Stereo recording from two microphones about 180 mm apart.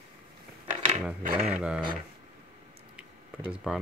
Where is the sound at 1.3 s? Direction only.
35° right (ahead or behind).